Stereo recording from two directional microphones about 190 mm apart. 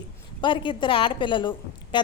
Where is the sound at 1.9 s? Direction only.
25° left (ahead or behind).